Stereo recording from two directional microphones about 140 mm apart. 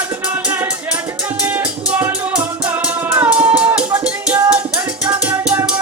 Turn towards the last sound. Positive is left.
turn(degrees=-10)  # may be behind; listen again after turning